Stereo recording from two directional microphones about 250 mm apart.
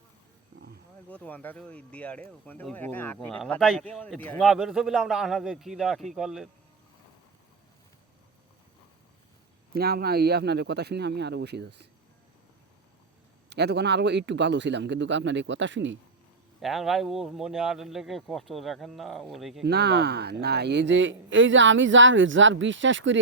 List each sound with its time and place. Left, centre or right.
1.1 s speech: centre
9.7 s speech: right
13.5 s a man's voice: right
16.6 s speech: centre
19.6 s a man's voice: right